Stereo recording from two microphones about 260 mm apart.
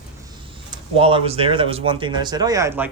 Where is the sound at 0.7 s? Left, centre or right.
Centre.